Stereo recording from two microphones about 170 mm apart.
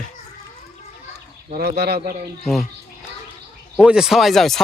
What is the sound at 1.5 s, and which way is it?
Speech, 65° right (ahead or behind).